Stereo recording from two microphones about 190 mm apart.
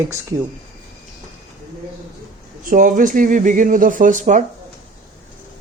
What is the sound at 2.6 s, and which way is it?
Speech, 45° right (ahead or behind).